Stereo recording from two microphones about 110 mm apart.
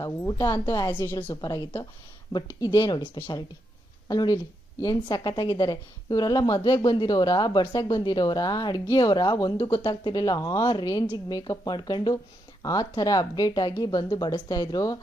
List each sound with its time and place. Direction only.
0.0 s a woman's voice: 30° left (ahead or behind)
2.3 s a woman's voice: 35° left (ahead or behind)
4.1 s a woman's voice: 35° left (ahead or behind)